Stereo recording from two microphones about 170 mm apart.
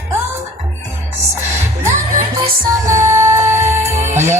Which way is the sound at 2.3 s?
20° right (ahead or behind).